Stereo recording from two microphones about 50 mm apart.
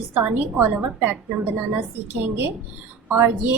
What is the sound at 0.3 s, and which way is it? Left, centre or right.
Speech, right.